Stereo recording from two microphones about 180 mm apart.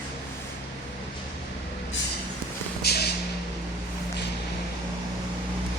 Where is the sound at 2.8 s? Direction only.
60° left (ahead or behind).